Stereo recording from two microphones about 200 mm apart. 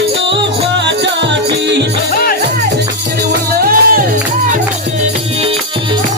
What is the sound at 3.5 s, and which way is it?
Music, 45° right (ahead or behind).